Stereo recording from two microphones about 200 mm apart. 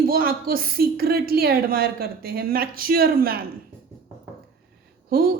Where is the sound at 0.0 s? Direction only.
45° right (ahead or behind).